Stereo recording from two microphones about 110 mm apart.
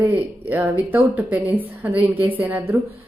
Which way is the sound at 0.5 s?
15° right (ahead or behind).